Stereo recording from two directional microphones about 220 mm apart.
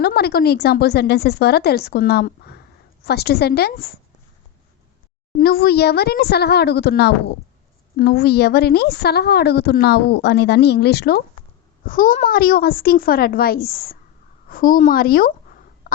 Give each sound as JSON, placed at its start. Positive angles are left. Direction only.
{"t": 0.0, "sound": "a woman's voice", "side_deg": 45}
{"t": 5.4, "sound": "a woman's voice", "side_deg": 45}